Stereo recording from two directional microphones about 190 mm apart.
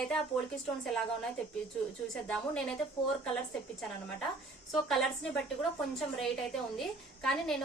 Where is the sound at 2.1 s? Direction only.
5° left (ahead or behind).